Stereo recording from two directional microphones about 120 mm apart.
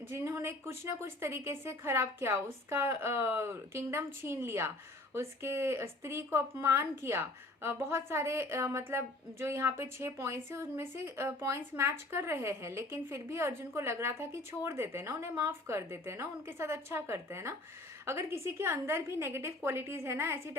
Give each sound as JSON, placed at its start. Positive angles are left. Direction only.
{"t": 0.1, "sound": "a woman's voice", "side_deg": -20}